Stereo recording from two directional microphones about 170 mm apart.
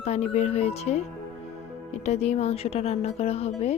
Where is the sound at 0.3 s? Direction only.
40° left (ahead or behind).